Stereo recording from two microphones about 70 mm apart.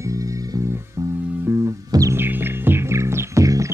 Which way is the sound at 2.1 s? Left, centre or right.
Right.